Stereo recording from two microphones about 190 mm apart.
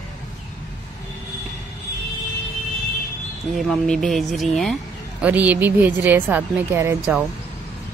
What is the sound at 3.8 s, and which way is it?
A woman's voice, centre (ahead or behind).